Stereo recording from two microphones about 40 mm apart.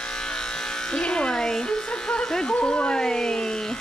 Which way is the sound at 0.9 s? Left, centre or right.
Left.